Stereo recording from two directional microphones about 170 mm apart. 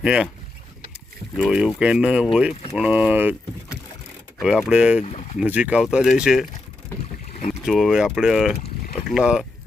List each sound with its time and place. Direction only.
0.0 s speech: 5° right (ahead or behind)
1.4 s speech: 5° right (ahead or behind)
4.4 s speech: 5° right (ahead or behind)
5.0 s speech: 40° left (ahead or behind)
5.4 s speech: 10° right (ahead or behind)
7.3 s boat: 45° left (ahead or behind)
7.6 s speech: centre (ahead or behind)